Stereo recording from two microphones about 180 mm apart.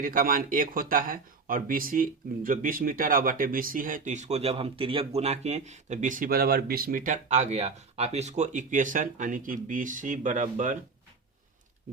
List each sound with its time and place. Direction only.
0.0 s speech: 50° right (ahead or behind)